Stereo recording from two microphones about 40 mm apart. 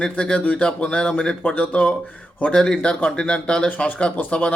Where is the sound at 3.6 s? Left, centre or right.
Left.